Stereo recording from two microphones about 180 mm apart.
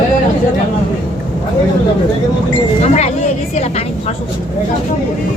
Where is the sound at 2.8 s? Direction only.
35° left (ahead or behind).